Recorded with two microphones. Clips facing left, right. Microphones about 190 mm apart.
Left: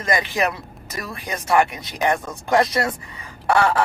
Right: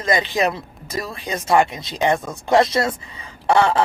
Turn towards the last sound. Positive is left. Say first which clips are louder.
# right 2 dB
turn(degrees=-25)  # may be behind; listen again after turning